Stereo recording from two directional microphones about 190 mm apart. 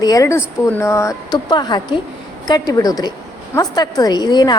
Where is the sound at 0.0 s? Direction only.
20° left (ahead or behind).